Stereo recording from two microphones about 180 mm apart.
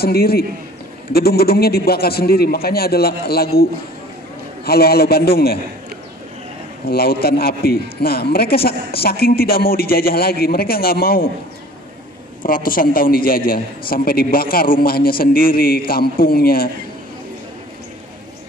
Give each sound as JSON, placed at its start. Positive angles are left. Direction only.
{"t": 0.0, "sound": "a man's voice", "side_deg": 60}
{"t": 4.6, "sound": "a man's voice", "side_deg": 60}
{"t": 6.9, "sound": "a man's voice", "side_deg": 60}
{"t": 12.4, "sound": "a man's voice", "side_deg": 50}